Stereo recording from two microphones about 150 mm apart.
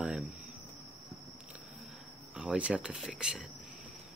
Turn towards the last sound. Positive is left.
turn(degrees=-5)  # may be behind; listen again after turning